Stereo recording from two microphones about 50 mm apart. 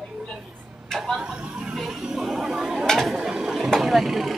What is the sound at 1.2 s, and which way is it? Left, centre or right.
Vehicle, centre.